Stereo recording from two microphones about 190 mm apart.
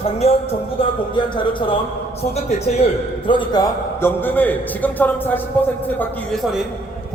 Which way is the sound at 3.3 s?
25° left (ahead or behind).